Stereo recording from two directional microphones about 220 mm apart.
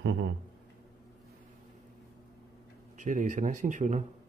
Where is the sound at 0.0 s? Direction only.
55° right (ahead or behind).